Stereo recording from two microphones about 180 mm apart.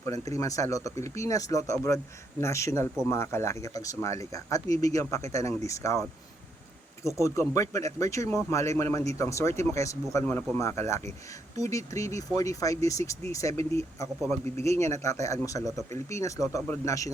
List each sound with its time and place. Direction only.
0.0 s speech: 15° left (ahead or behind)
7.2 s speech: 15° left (ahead or behind)